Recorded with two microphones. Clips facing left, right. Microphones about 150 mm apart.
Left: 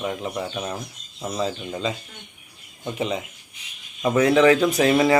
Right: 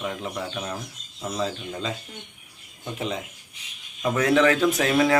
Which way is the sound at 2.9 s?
Centre (ahead or behind).